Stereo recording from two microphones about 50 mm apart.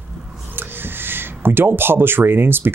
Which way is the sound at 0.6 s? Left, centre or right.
Right.